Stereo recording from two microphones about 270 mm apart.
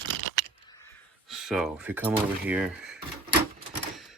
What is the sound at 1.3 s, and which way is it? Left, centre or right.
Speech, centre.